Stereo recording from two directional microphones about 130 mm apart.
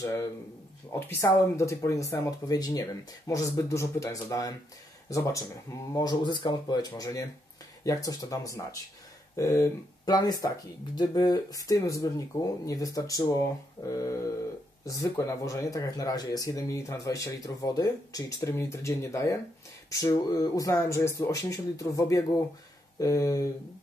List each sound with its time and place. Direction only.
0.0 s speech: 25° left (ahead or behind)
5.9 s speech: 35° left (ahead or behind)